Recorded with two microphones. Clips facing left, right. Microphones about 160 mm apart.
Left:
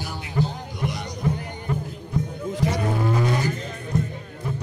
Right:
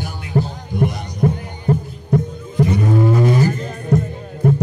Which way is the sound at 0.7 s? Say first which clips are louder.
Right 12 dB; 55° right (ahead or behind).